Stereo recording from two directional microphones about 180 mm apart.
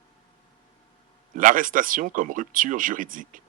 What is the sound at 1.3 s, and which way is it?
Speech, 50° right (ahead or behind).